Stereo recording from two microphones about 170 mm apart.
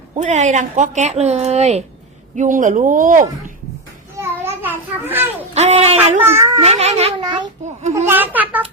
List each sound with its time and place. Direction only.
0.1 s speech: 45° right (ahead or behind)
4.2 s a sound: 10° right (ahead or behind)
5.5 s speech: 40° right (ahead or behind)
6.1 s a woman's voice: 15° right (ahead or behind)
6.6 s speech: 40° right (ahead or behind)
7.2 s a child's voice: 25° right (ahead or behind)
7.6 s speech: 40° right (ahead or behind)
7.9 s a woman's voice: 10° right (ahead or behind)